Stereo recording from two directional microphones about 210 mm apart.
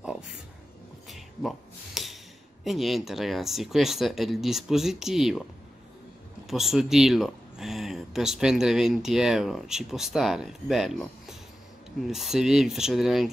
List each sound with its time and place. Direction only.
2.0 s gasp: centre (ahead or behind)
2.6 s speech: centre (ahead or behind)
6.5 s speech: centre (ahead or behind)